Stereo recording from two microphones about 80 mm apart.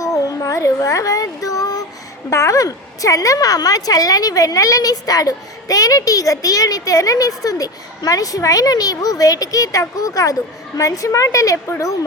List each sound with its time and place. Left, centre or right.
0.0 s child singing: left
2.3 s a woman's voice: left